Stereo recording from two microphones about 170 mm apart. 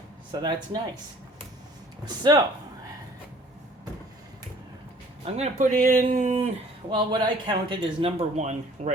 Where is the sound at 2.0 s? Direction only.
25° right (ahead or behind).